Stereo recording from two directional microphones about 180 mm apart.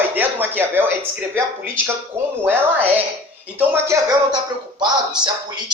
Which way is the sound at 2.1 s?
15° right (ahead or behind).